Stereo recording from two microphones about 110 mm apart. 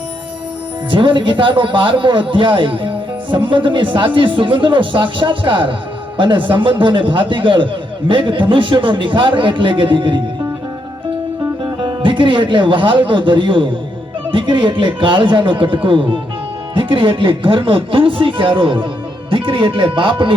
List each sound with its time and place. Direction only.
0.9 s speech: 50° right (ahead or behind)
11.6 s speech: 45° right (ahead or behind)